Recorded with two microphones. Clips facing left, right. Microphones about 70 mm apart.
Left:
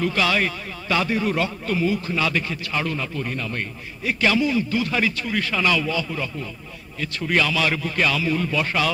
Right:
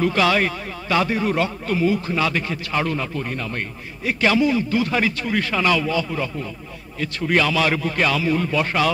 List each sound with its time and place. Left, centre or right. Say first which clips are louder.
0.0 s a man's voice: right 3 dB; right